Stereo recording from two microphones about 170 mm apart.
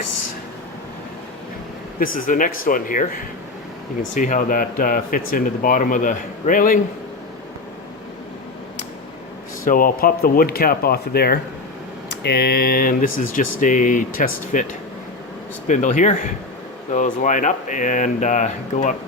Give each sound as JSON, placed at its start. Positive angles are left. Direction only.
{"t": 2.0, "sound": "speech", "side_deg": 50}
{"t": 4.1, "sound": "speech", "side_deg": 50}
{"t": 9.6, "sound": "speech", "side_deg": 55}